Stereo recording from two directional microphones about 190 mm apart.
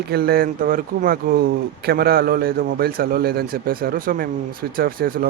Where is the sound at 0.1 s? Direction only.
55° right (ahead or behind).